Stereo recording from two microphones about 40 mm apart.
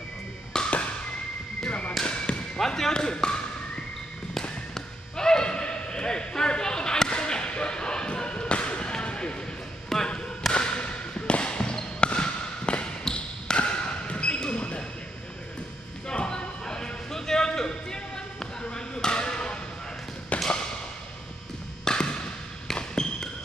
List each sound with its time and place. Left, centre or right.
0.5 s a sound: centre
1.7 s basketball bounce: left
2.6 s speech: centre
4.3 s basketball bounce: centre
9.9 s basketball bounce: centre
10.5 s basketball bounce: left
16.1 s music: left
20.3 s a sound: left
21.8 s a sound: left
22.8 s basketball bounce: centre